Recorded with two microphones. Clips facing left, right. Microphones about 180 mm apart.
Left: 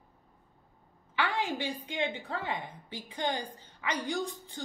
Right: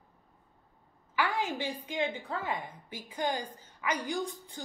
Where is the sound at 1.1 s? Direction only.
25° left (ahead or behind).